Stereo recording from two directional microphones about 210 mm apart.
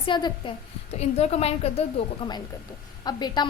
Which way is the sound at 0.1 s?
20° left (ahead or behind).